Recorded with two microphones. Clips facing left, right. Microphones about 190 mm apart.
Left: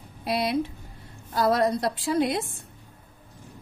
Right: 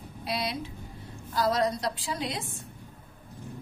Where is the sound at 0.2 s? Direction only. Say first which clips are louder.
Left 7 dB; 55° left (ahead or behind).